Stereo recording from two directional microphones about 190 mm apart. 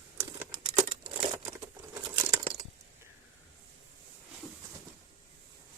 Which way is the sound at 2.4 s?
25° right (ahead or behind).